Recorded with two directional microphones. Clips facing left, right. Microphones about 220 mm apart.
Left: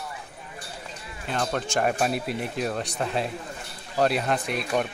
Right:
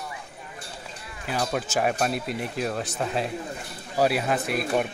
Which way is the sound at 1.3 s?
5° right (ahead or behind).